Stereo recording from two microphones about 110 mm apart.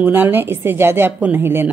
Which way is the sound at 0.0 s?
15° right (ahead or behind).